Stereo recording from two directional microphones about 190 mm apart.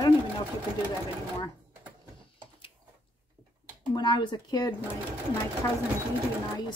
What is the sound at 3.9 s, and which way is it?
Speech, 25° left (ahead or behind).